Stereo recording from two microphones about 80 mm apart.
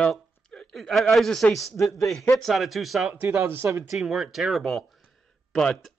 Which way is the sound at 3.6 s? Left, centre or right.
Right.